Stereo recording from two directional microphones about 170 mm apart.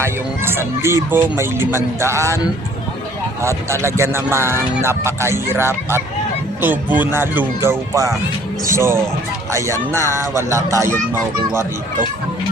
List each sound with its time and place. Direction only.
0.0 s speech: 15° right (ahead or behind)
3.4 s speech: 15° right (ahead or behind)